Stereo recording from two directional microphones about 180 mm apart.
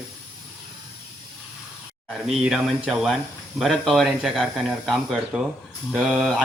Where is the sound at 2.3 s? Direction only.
5° right (ahead or behind).